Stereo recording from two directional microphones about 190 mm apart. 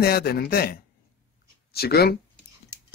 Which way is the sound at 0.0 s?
55° left (ahead or behind).